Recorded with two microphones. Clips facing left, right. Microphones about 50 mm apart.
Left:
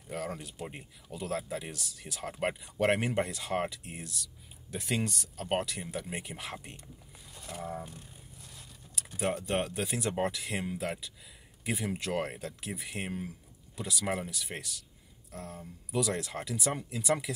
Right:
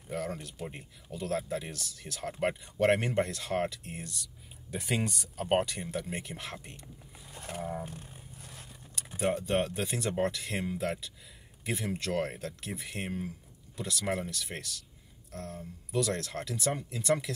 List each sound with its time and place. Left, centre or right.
0.1 s speech: centre
5.7 s speech: centre
7.2 s a sound: right
9.1 s speech: centre